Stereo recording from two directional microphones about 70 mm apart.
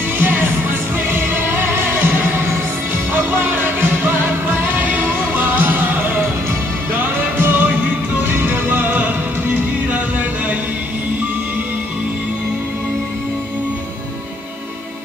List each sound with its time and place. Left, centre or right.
0.2 s music: right